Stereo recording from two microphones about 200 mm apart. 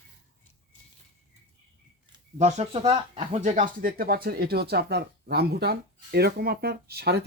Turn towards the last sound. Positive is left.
turn(degrees=-55)  # may be behind; listen again after turning